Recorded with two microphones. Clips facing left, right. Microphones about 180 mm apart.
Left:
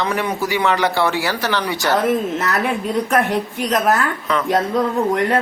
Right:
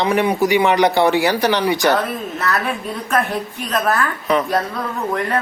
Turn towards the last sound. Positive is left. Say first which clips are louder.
# left 2 dB
turn(degrees=20)  # may be behind; listen again after turning